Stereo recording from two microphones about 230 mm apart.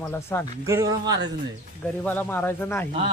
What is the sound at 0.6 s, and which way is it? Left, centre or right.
Speech, centre.